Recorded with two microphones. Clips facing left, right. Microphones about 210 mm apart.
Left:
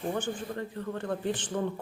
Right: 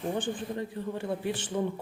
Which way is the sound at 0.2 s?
15° right (ahead or behind).